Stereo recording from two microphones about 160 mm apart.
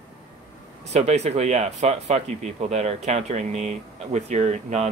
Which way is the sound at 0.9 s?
45° right (ahead or behind).